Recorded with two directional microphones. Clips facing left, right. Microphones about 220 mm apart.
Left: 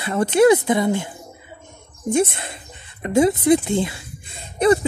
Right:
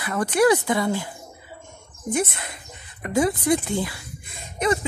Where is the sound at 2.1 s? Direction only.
25° left (ahead or behind).